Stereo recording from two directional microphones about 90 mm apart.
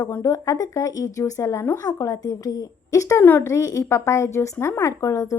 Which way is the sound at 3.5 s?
35° left (ahead or behind).